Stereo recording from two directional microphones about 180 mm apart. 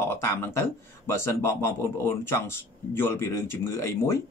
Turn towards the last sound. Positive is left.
turn(degrees=15)  # may be behind; listen again after turning